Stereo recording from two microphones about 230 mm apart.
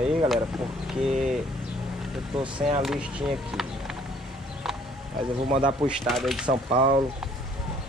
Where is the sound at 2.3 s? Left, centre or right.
Right.